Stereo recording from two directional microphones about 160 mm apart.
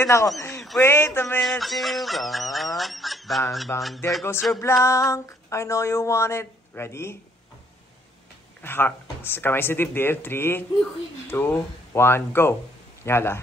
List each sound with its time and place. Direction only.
0.0 s speech: 20° left (ahead or behind)
0.4 s a sound: 15° left (ahead or behind)
0.7 s speech: 15° left (ahead or behind)
1.4 s a sound: centre (ahead or behind)
3.7 s speech: 15° left (ahead or behind)
8.6 s speech: 15° left (ahead or behind)